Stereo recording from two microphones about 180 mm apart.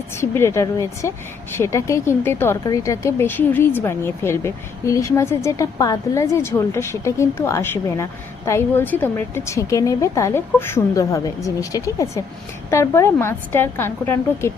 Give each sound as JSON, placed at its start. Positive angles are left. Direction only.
{"t": 0.2, "sound": "speech", "side_deg": 15}